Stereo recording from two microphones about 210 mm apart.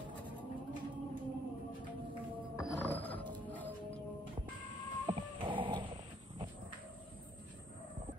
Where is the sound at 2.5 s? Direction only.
10° left (ahead or behind).